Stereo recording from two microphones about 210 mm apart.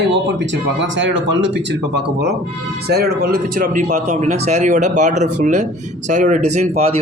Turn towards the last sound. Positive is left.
turn(degrees=-30)  # may be behind; listen again after turning